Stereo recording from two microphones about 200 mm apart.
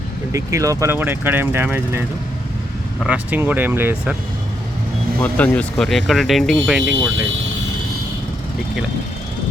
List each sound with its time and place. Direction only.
0.3 s speech: 15° right (ahead or behind)
5.2 s speech: 5° left (ahead or behind)